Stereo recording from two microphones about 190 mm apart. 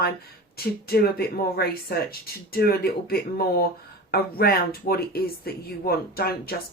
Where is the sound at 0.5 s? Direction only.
55° left (ahead or behind).